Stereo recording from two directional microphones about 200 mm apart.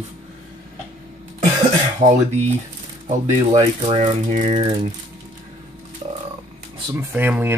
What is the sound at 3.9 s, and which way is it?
Speech, 35° right (ahead or behind).